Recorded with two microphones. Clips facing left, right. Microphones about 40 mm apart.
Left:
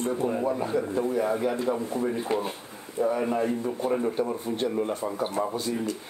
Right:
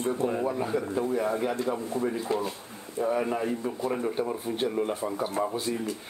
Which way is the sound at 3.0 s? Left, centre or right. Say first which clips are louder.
Left 2 dB; centre.